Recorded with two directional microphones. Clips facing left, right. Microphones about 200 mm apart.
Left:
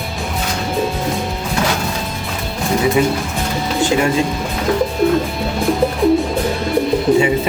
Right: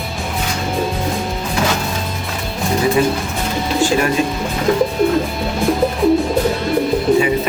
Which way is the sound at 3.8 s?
20° left (ahead or behind).